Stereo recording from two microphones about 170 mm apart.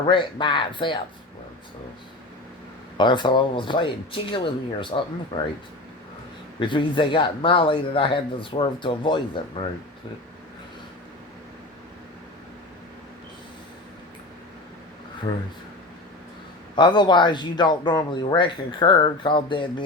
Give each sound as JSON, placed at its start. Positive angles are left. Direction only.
{"t": 0.1, "sound": "speech", "side_deg": 30}
{"t": 3.0, "sound": "speech", "side_deg": 25}
{"t": 6.6, "sound": "speech", "side_deg": 30}
{"t": 15.3, "sound": "speech", "side_deg": 25}
{"t": 16.7, "sound": "speech", "side_deg": 25}